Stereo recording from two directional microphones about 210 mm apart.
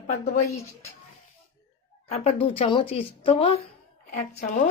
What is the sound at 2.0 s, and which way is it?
Speech, 30° left (ahead or behind).